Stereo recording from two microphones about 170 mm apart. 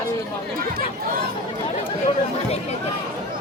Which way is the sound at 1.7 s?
35° left (ahead or behind).